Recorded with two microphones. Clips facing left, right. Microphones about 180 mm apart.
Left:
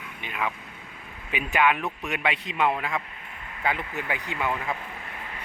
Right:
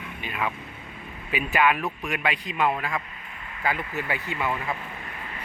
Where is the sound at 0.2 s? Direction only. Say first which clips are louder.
Right 1 dB; 20° left (ahead or behind).